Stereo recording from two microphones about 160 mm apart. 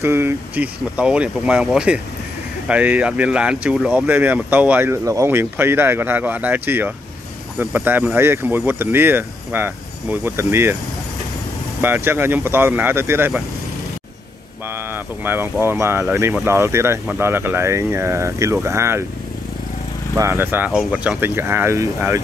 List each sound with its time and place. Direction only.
0.0 s speech: 15° right (ahead or behind)
11.8 s speech: 15° right (ahead or behind)
14.9 s speech: 15° right (ahead or behind)
20.2 s speech: 15° right (ahead or behind)